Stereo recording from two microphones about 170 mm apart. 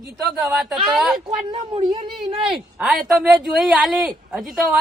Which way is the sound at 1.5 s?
30° right (ahead or behind).